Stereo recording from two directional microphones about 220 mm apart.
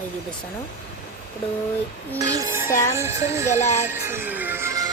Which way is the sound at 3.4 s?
30° left (ahead or behind).